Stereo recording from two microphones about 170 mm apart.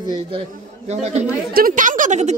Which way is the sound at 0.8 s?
40° right (ahead or behind).